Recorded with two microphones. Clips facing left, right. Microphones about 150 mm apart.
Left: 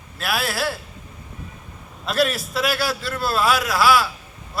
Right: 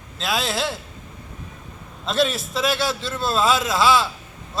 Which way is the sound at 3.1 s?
25° right (ahead or behind).